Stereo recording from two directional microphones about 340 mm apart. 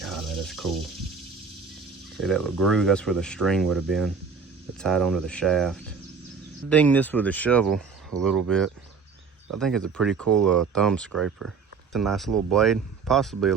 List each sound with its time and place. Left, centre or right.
0.0 s a sound: centre
2.1 s speech: centre
11.3 s speech: right
11.9 s speech: centre